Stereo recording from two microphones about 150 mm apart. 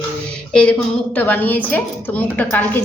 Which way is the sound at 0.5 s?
5° left (ahead or behind).